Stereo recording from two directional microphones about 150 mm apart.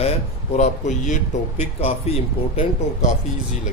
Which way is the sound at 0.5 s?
55° left (ahead or behind).